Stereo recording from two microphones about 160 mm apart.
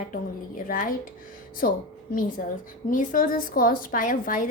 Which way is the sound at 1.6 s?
70° left (ahead or behind).